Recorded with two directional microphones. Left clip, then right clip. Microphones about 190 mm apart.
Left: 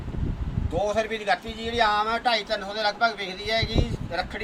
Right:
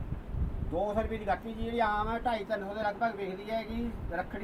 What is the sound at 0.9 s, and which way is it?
Speech, 20° left (ahead or behind).